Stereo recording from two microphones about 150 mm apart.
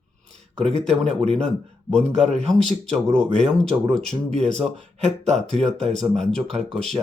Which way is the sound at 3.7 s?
20° right (ahead or behind).